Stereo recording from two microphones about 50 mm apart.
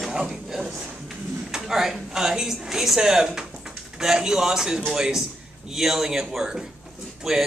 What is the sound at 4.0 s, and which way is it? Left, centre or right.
Speech, centre.